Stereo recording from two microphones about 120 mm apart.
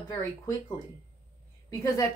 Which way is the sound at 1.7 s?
25° left (ahead or behind).